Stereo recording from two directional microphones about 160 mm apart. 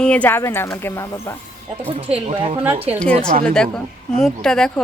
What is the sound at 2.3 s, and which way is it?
Speech, 35° right (ahead or behind).